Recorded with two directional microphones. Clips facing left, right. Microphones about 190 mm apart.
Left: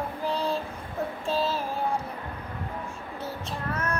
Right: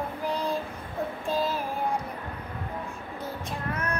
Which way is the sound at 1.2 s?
15° right (ahead or behind).